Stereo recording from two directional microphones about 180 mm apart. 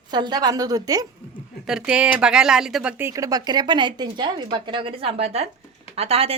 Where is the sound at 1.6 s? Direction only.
5° right (ahead or behind).